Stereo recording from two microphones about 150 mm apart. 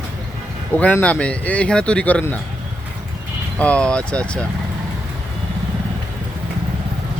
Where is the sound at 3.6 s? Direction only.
5° left (ahead or behind).